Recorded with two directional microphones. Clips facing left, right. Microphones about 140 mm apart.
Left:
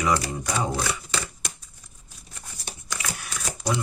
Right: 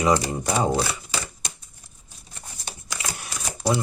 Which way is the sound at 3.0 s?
30° right (ahead or behind).